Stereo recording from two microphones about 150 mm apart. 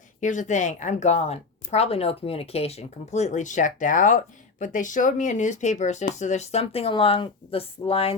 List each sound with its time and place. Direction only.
0.2 s speech: 55° left (ahead or behind)